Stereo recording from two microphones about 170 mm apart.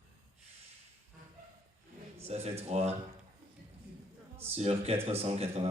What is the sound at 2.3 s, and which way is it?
Speech, 40° right (ahead or behind).